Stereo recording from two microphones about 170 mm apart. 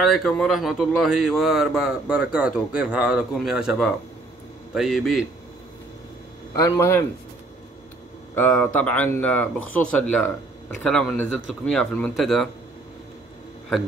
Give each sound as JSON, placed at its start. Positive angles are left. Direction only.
{"t": 0.0, "sound": "speech", "side_deg": 0}
{"t": 4.7, "sound": "speech", "side_deg": 0}
{"t": 6.5, "sound": "speech", "side_deg": 20}
{"t": 8.4, "sound": "speech", "side_deg": 10}